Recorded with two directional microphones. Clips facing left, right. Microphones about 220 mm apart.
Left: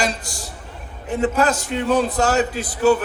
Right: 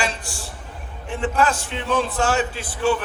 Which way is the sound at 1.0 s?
40° left (ahead or behind).